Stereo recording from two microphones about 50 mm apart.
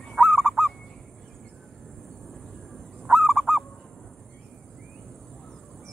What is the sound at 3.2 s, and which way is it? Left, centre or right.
Honk, centre.